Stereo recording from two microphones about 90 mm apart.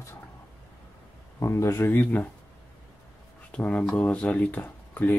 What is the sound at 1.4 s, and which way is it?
Speech, 30° left (ahead or behind).